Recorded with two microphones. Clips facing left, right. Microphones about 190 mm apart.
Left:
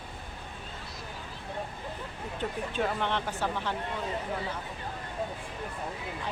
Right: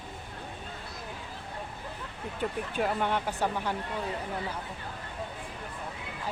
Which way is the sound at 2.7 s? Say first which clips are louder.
Right 1 dB; 10° right (ahead or behind).